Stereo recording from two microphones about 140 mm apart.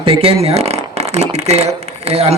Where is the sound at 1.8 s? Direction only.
50° right (ahead or behind).